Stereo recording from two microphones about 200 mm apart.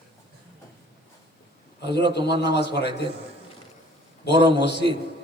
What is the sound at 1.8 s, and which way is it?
A man's voice, 55° left (ahead or behind).